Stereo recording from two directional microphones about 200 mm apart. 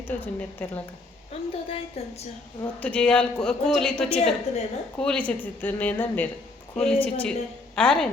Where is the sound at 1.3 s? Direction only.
30° left (ahead or behind).